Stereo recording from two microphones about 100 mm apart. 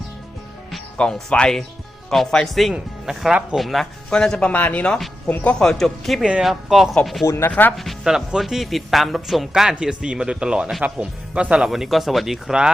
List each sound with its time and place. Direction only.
0.7 s speech: 10° left (ahead or behind)
7.3 s speech: 25° left (ahead or behind)
7.8 s speech: centre (ahead or behind)